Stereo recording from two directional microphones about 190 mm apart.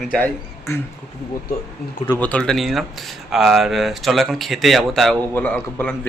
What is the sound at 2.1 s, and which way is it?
Speech, 10° left (ahead or behind).